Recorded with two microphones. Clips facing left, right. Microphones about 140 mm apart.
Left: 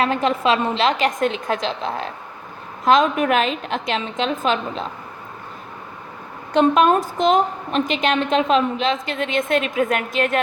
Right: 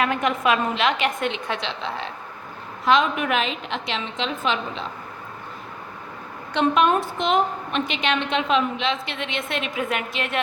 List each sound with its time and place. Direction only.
0.0 s a woman's voice: 30° left (ahead or behind)
6.5 s a woman's voice: 40° left (ahead or behind)